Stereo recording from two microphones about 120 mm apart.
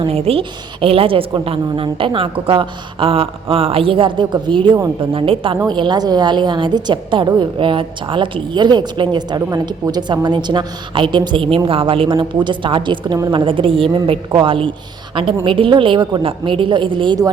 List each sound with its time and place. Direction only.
0.0 s a woman's voice: 55° right (ahead or behind)